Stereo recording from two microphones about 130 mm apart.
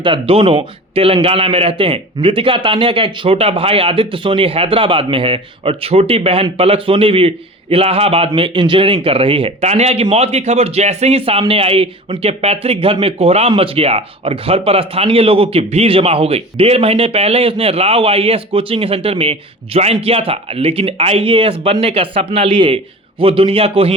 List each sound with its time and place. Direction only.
0.0 s speech: 40° right (ahead or behind)